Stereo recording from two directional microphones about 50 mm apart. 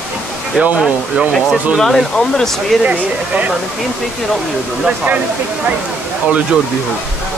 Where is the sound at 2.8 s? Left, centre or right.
Right.